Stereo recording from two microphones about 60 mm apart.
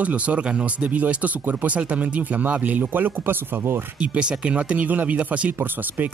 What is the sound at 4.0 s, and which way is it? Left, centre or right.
Speech, centre.